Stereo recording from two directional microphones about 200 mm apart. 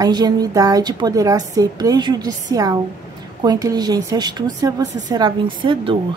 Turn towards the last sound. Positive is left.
turn(degrees=-25)  # may be behind; listen again after turning